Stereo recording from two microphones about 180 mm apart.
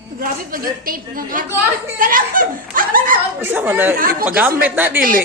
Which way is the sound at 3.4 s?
10° right (ahead or behind).